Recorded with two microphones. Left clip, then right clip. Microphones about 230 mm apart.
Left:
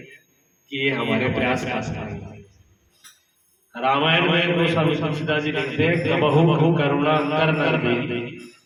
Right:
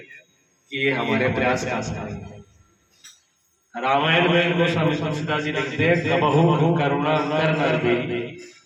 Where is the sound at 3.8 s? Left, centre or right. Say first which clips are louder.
Even; left.